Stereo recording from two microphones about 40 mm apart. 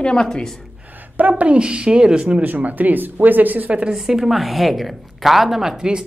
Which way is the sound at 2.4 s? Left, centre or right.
Right.